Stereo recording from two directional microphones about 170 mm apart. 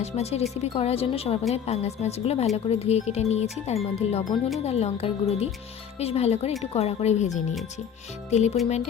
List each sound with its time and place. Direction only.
0.0 s speech: 40° left (ahead or behind)